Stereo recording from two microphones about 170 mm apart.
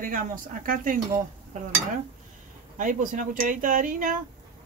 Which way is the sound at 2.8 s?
50° right (ahead or behind).